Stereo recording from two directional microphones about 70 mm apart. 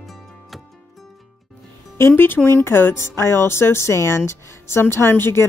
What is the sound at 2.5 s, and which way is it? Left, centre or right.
Speech, left.